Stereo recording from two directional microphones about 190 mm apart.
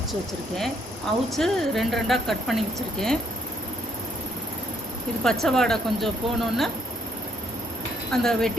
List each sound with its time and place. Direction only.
0.1 s speech: centre (ahead or behind)
5.2 s speech: centre (ahead or behind)
8.1 s speech: centre (ahead or behind)